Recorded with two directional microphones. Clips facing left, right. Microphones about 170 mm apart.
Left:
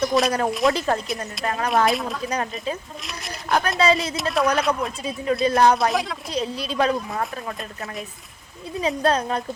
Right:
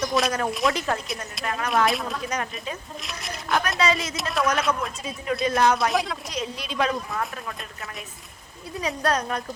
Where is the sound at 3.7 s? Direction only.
30° left (ahead or behind).